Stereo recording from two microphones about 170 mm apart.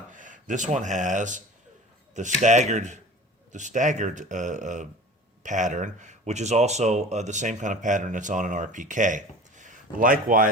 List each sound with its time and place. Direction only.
0.1 s speech: 50° right (ahead or behind)